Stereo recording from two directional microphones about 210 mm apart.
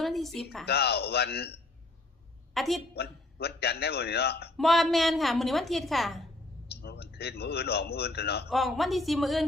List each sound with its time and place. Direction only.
0.0 s a sound: centre (ahead or behind)
0.6 s a man's voice: 50° left (ahead or behind)
2.6 s speech: centre (ahead or behind)
2.9 s a man's voice: 50° left (ahead or behind)
4.5 s speech: centre (ahead or behind)
6.8 s a man's voice: 50° left (ahead or behind)
8.4 s speech: centre (ahead or behind)